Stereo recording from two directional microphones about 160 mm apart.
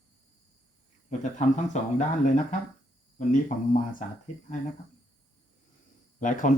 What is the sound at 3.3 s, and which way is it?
Speech, 50° left (ahead or behind).